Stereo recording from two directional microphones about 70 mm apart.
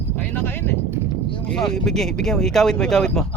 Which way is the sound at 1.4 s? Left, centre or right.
Centre.